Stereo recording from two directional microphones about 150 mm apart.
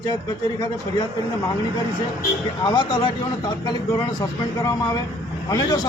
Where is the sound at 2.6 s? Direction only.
30° left (ahead or behind).